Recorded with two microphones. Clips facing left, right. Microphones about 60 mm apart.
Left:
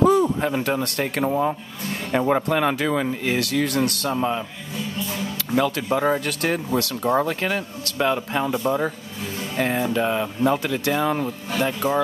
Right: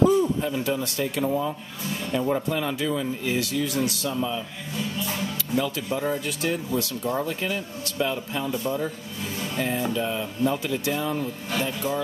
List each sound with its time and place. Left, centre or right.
0.0 s speech: left
1.2 s speech: left
1.9 s speech: left
5.5 s speech: left